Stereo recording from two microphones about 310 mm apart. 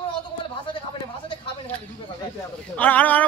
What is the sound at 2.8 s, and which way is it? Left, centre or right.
Speech, centre.